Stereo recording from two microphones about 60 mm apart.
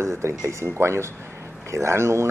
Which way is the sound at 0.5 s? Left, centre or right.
Right.